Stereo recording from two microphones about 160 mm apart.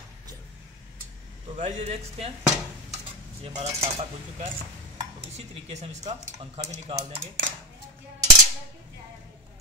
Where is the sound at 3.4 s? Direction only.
35° right (ahead or behind).